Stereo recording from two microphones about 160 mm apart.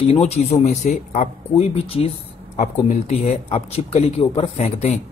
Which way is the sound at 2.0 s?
40° left (ahead or behind).